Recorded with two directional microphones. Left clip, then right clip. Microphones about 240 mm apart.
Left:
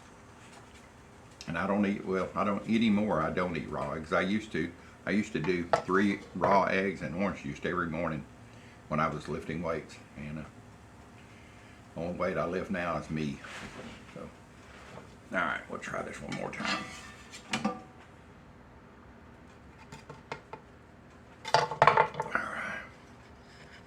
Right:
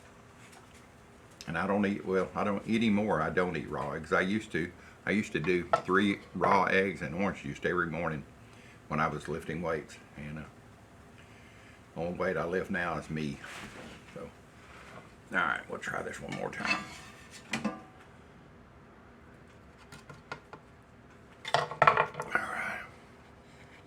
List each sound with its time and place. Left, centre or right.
1.4 s speech: right
11.9 s speech: right
15.3 s speech: right
21.4 s dishes: centre
22.3 s a sound: right